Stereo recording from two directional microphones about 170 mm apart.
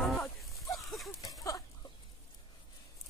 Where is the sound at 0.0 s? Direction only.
Centre (ahead or behind).